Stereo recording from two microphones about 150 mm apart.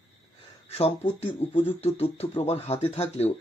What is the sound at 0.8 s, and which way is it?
Speech, 45° left (ahead or behind).